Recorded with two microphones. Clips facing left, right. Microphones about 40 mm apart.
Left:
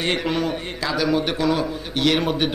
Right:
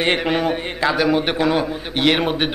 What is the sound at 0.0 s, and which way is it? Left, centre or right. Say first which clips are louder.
Speech: right 4 dB; right.